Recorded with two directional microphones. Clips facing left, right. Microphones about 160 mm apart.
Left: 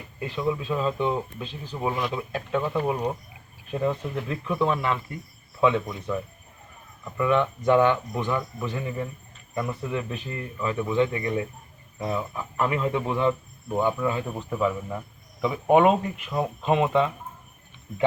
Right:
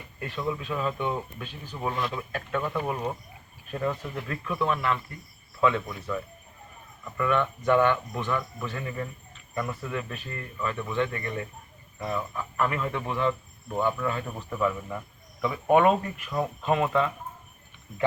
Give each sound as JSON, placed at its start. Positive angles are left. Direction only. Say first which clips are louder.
{"t": 0.2, "sound": "speech", "louder": "left 4 dB", "side_deg": 15}
{"t": 1.9, "sound": "speech", "louder": "left 2 dB", "side_deg": 5}
{"t": 7.3, "sound": "speech", "louder": "left 3 dB", "side_deg": 25}